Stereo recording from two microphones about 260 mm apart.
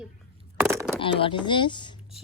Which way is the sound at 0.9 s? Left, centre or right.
Centre.